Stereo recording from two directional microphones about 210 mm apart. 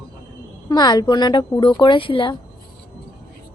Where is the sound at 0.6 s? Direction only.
20° left (ahead or behind).